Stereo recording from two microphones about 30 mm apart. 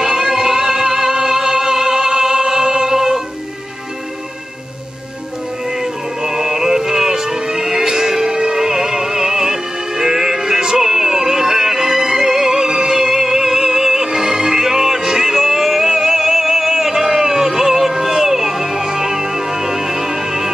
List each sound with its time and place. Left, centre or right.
0.0 s music: centre
5.7 s music: centre